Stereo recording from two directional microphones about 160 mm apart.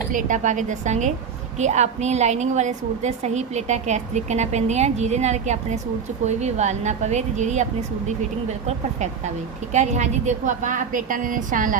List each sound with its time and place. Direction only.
0.1 s a woman's voice: 55° right (ahead or behind)